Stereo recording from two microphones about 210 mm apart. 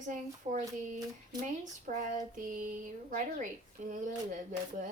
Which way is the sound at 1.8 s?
35° right (ahead or behind).